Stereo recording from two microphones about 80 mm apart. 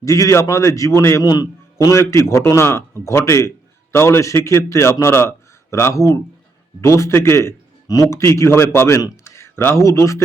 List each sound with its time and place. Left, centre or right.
0.0 s a man's voice: left
1.2 s a man's voice: left